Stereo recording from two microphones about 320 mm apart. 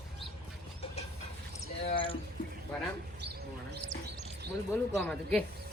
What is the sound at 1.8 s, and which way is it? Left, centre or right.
Speech, centre.